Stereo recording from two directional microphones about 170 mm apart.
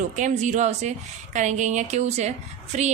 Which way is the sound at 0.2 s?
45° right (ahead or behind).